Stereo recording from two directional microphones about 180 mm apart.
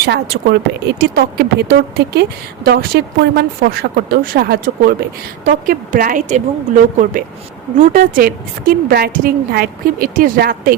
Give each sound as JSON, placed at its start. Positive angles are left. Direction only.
{"t": 0.1, "sound": "a woman's voice", "side_deg": -65}